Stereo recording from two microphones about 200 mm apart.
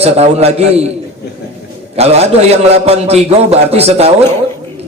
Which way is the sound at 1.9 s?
30° right (ahead or behind).